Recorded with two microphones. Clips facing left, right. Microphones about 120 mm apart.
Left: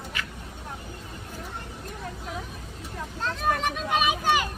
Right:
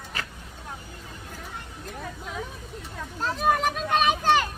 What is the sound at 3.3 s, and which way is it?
Vehicle, 5° right (ahead or behind).